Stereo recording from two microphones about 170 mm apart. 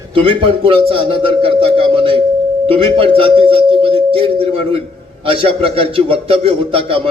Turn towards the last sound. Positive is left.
turn(degrees=-30)  # may be behind; listen again after turning